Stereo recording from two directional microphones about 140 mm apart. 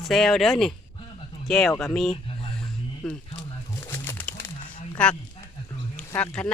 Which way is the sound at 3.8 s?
20° left (ahead or behind).